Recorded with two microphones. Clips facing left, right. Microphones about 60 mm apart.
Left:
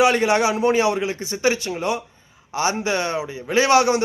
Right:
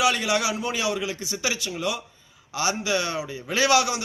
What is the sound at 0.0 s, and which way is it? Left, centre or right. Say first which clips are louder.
Speech: left 6 dB; left.